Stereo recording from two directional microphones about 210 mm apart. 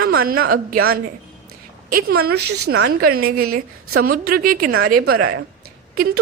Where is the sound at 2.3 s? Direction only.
50° right (ahead or behind).